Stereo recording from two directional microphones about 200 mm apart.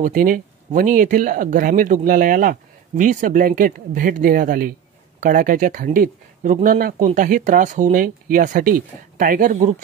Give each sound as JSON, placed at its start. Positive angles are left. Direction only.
{"t": 0.0, "sound": "speech", "side_deg": -45}